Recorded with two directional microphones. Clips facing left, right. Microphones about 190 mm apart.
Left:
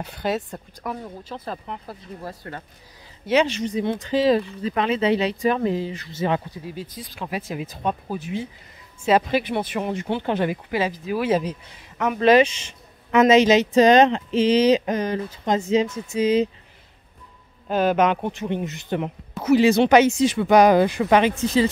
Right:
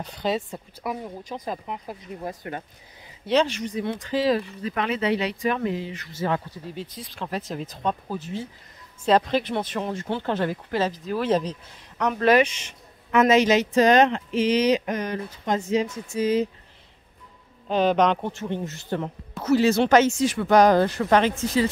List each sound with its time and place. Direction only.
0.0 s speech: 5° left (ahead or behind)
0.8 s speech: 15° right (ahead or behind)
3.4 s a man's voice: 25° left (ahead or behind)
6.6 s speech: 5° left (ahead or behind)
12.2 s a man's voice: 25° left (ahead or behind)
17.6 s speech: 5° left (ahead or behind)